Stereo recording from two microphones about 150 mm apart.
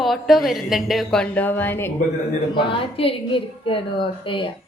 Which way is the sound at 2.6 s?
35° left (ahead or behind).